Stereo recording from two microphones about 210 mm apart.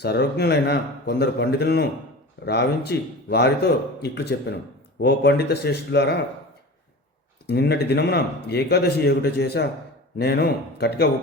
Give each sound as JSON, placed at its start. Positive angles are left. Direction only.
{"t": 0.0, "sound": "speech", "side_deg": 50}
{"t": 7.4, "sound": "speech", "side_deg": 50}